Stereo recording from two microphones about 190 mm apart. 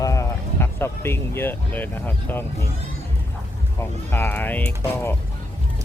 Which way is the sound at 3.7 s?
10° left (ahead or behind).